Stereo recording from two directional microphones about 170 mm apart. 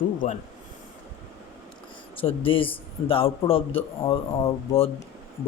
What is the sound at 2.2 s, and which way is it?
A man's voice, 30° left (ahead or behind).